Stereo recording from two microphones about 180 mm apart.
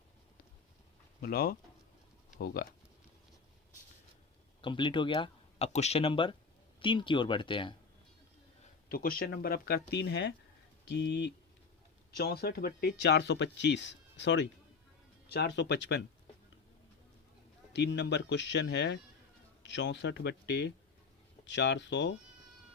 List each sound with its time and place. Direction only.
1.2 s speech: 55° left (ahead or behind)
4.6 s speech: 25° left (ahead or behind)
8.9 s speech: 55° left (ahead or behind); by 11.2 s 70° left (ahead or behind)
12.1 s speech: 60° left (ahead or behind); by 14.4 s 80° left
15.3 s speech: 65° left (ahead or behind)
17.7 s speech: 75° left (ahead or behind)